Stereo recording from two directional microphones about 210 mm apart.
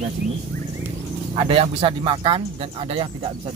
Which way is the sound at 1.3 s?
25° right (ahead or behind).